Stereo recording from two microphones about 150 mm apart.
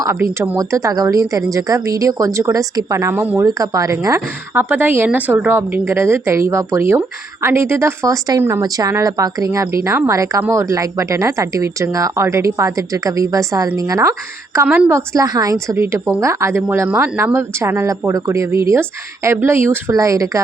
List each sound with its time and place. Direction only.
0.0 s a woman's voice: 15° right (ahead or behind)